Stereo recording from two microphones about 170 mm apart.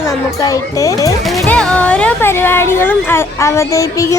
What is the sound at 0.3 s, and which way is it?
Speech, 20° left (ahead or behind).